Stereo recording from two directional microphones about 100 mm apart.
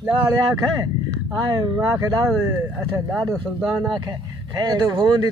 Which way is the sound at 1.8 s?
30° right (ahead or behind).